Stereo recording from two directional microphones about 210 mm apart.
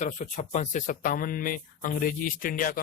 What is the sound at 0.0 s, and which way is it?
Speech, 35° left (ahead or behind).